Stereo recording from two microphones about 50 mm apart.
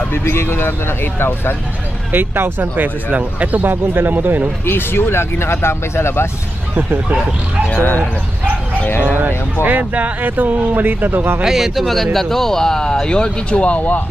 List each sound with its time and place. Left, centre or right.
0.1 s speech: left
2.1 s speech: right
3.6 s speech: right
4.6 s speech: left
6.7 s speech: right
8.8 s speech: left
9.6 s speech: right
11.4 s speech: centre
11.8 s speech: centre; by 14.0 s left